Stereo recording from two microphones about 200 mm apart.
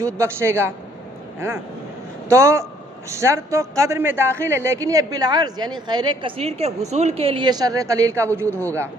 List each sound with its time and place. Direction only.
0.0 s a man's voice: 15° right (ahead or behind)
2.3 s a man's voice: 15° right (ahead or behind)
8.4 s speech: 10° left (ahead or behind)